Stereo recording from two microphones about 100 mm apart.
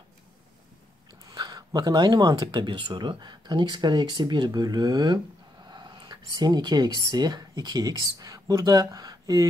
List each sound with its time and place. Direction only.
1.3 s speech: 40° right (ahead or behind)
5.7 s a sound: 50° right (ahead or behind)
7.1 s speech: 45° right (ahead or behind)